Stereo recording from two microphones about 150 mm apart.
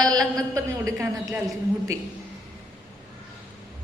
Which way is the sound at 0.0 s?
25° right (ahead or behind).